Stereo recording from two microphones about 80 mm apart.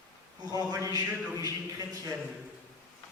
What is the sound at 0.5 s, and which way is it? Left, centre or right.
A man's voice, right.